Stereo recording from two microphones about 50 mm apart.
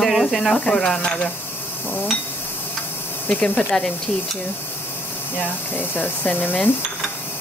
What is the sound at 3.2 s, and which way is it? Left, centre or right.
Speech, left.